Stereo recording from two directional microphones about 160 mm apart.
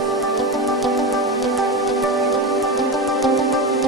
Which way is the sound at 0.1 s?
Centre (ahead or behind).